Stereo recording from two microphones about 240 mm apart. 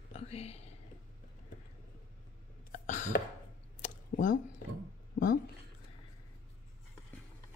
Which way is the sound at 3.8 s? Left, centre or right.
Left.